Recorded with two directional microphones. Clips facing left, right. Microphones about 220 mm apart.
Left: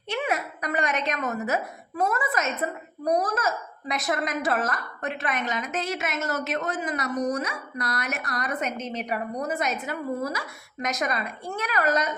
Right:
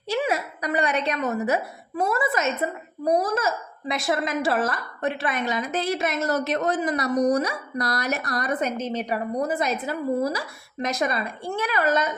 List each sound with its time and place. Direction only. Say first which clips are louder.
0.1 s a woman's voice: right 3 dB; 30° right (ahead or behind)